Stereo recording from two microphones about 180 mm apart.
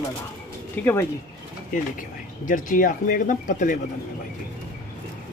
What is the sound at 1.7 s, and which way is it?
Speech, 45° left (ahead or behind).